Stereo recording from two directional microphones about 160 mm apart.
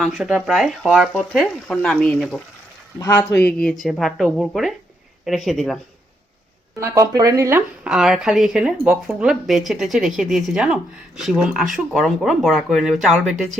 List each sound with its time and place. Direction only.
0.0 s speech: 5° right (ahead or behind)
3.0 s speech: 20° left (ahead or behind); by 5.8 s centre (ahead or behind)
6.7 s speech: 20° right (ahead or behind)
7.9 s speech: 5° right (ahead or behind)